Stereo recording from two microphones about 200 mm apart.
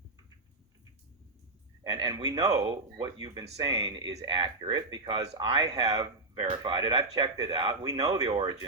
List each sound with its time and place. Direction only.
1.9 s speech: 20° right (ahead or behind)